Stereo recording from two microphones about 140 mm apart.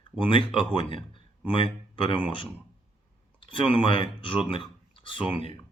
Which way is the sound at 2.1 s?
35° left (ahead or behind).